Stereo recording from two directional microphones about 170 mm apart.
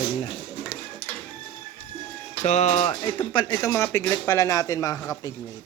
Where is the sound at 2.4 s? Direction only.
40° left (ahead or behind).